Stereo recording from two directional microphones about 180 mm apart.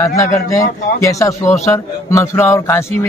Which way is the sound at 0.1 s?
15° left (ahead or behind).